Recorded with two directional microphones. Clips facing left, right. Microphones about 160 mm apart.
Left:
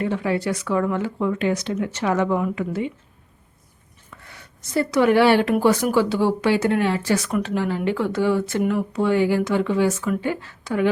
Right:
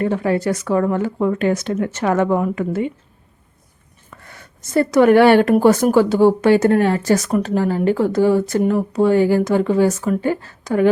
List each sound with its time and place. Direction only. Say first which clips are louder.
0.0 s speech: right 4 dB; 45° right (ahead or behind)
4.1 s speech: right 3 dB; 50° right (ahead or behind)